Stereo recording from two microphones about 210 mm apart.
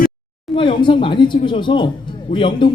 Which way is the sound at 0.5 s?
25° left (ahead or behind).